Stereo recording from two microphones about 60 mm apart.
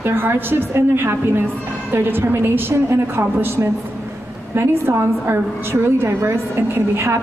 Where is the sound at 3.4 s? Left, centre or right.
Right.